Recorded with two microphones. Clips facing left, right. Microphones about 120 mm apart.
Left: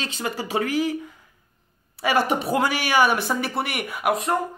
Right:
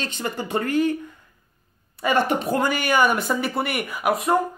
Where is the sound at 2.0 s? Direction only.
5° left (ahead or behind).